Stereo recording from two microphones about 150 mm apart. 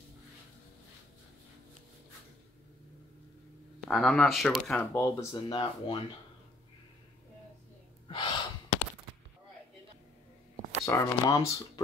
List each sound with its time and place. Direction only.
3.8 s speech: centre (ahead or behind)
4.9 s speech: 20° left (ahead or behind)
5.3 s speech: 35° left (ahead or behind)
8.1 s gasp: 35° left (ahead or behind)
10.9 s speech: 20° left (ahead or behind)